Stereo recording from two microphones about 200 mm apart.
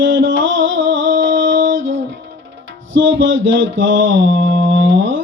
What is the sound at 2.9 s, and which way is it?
Mantra, 70° right (ahead or behind).